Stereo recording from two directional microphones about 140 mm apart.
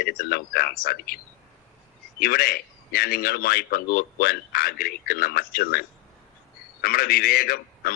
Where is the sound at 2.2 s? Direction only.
90° left.